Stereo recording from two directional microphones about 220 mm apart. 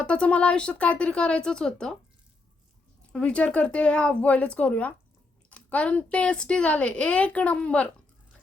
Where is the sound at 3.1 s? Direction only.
5° left (ahead or behind).